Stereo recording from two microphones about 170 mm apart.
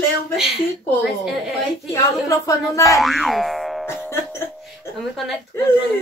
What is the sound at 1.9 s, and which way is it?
Speech, 20° left (ahead or behind).